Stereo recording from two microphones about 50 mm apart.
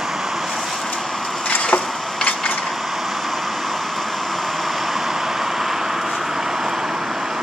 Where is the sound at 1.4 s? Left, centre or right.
Left.